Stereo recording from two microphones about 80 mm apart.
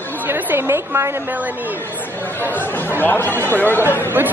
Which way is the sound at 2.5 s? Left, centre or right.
Left.